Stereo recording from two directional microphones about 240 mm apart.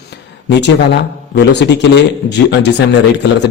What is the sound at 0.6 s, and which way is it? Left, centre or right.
Speech, left.